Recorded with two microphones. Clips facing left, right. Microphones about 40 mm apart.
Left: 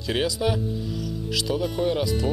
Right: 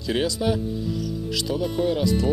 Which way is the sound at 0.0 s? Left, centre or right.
Centre.